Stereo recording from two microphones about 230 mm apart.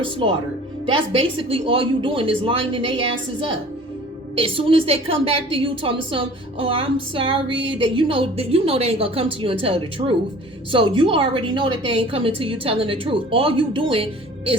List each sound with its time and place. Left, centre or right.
0.0 s a woman's voice: right